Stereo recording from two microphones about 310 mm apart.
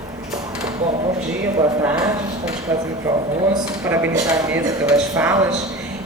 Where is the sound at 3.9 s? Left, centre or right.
Centre.